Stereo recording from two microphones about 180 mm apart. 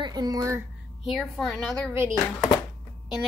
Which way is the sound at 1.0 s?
Centre (ahead or behind).